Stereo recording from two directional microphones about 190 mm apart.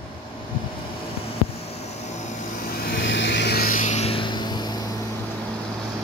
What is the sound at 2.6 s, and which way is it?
Vehicle, 55° left (ahead or behind).